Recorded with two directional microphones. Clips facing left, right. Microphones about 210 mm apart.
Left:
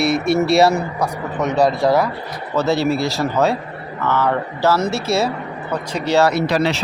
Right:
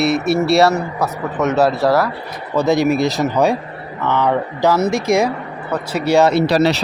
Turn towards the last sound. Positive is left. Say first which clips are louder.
# right 4 dB
turn(degrees=-35)  # may be behind; listen again after turning